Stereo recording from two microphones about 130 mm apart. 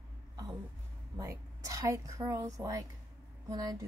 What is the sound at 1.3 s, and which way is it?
Speech, 20° right (ahead or behind).